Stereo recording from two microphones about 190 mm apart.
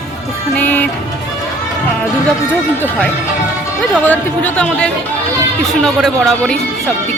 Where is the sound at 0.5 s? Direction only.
10° left (ahead or behind).